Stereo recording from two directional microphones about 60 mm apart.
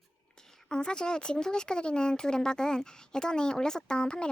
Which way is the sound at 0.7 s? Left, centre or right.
Centre.